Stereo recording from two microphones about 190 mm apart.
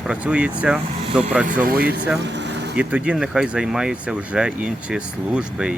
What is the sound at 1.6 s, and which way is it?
Speech, 50° right (ahead or behind).